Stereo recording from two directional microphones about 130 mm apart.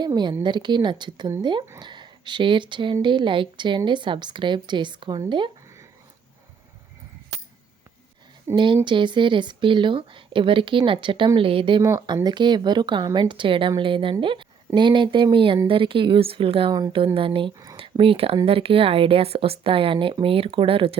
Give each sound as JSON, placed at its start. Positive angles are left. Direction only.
{"t": 0.0, "sound": "speech", "side_deg": -35}
{"t": 8.5, "sound": "speech", "side_deg": -40}
{"t": 11.8, "sound": "speech", "side_deg": -25}